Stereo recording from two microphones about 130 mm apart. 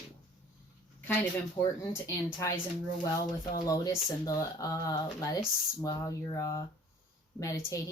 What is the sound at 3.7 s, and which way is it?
Speech, 25° left (ahead or behind).